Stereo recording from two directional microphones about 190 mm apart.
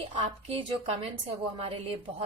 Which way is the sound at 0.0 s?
30° right (ahead or behind).